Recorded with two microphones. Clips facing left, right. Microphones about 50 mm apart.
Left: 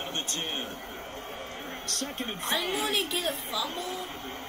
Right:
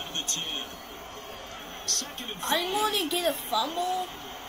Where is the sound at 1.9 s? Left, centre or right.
Left.